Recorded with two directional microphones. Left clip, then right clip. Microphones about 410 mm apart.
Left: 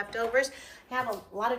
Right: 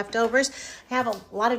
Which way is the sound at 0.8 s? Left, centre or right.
Right.